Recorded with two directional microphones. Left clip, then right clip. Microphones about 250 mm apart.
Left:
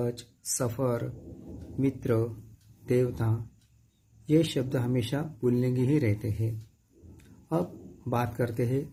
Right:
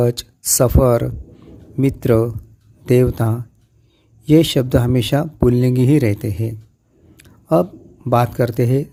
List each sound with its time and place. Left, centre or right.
0.0 s speech: right
7.2 s a sound: right
8.1 s speech: right